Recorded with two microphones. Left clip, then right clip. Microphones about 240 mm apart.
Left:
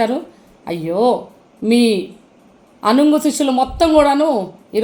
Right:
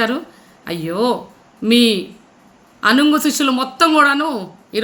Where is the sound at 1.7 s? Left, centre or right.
Centre.